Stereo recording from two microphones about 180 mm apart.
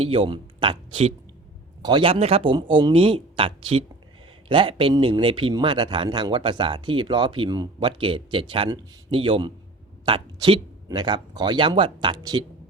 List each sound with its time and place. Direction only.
0.0 s speech: 30° right (ahead or behind)